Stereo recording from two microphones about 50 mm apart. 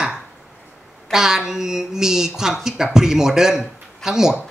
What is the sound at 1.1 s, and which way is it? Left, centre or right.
A woman's voice, centre.